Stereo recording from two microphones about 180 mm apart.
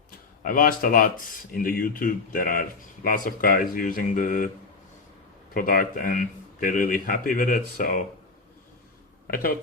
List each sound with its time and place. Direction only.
0.4 s speech: 50° left (ahead or behind)
5.5 s speech: 50° left (ahead or behind)
9.3 s speech: 55° left (ahead or behind)